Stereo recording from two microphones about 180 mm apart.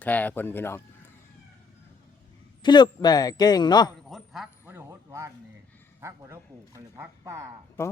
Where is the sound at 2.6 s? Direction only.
25° left (ahead or behind).